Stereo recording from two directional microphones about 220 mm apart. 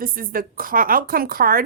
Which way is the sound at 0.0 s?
40° right (ahead or behind).